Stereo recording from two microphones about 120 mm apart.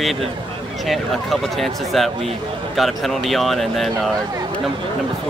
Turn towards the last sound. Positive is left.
turn(degrees=0)  # may be behind; listen again after turning